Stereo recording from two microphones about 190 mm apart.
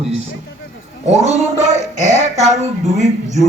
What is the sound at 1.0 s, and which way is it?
Speech, 35° right (ahead or behind).